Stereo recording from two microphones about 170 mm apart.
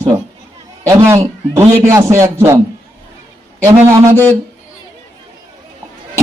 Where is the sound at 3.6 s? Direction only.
15° right (ahead or behind).